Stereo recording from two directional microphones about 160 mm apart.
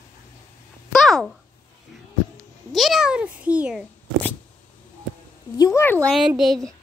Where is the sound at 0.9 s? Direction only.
Centre (ahead or behind).